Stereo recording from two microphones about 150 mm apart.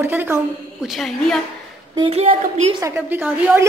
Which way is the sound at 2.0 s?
40° right (ahead or behind).